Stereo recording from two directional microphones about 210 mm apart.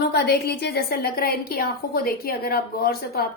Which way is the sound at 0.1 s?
50° left (ahead or behind).